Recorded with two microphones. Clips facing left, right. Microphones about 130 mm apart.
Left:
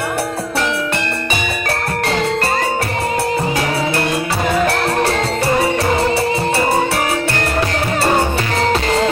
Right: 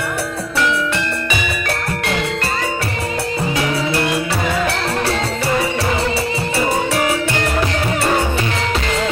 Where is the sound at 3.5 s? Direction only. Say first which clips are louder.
Left 1 dB; 55° left (ahead or behind).